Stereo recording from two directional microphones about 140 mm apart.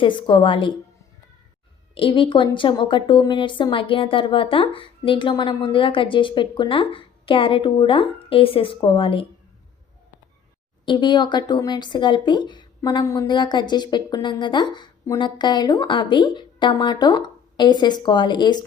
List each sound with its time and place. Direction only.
0.0 s a woman's voice: 35° left (ahead or behind)
2.0 s a woman's voice: 35° left (ahead or behind)
10.8 s a woman's voice: 30° left (ahead or behind)